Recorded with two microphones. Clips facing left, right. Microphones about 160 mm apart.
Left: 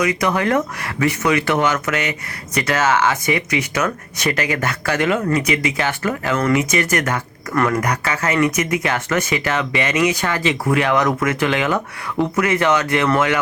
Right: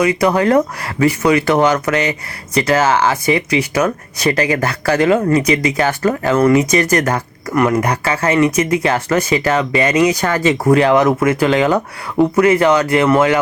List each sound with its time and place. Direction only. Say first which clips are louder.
0.0 s speech: right 5 dB; 30° right (ahead or behind)
7.5 s speech: right 4 dB; 20° right (ahead or behind)